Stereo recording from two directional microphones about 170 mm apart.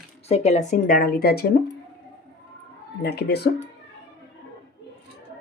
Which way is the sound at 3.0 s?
70° left (ahead or behind).